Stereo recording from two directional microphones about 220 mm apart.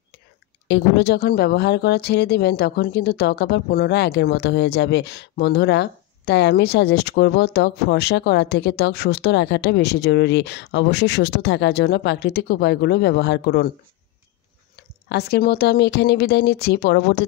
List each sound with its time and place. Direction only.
0.7 s speech: 50° left (ahead or behind)
15.0 s speech: 45° left (ahead or behind)